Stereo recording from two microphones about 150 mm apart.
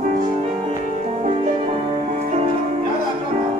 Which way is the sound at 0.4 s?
45° right (ahead or behind).